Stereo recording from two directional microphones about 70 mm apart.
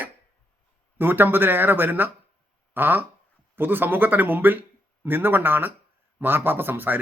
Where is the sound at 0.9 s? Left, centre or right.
Right.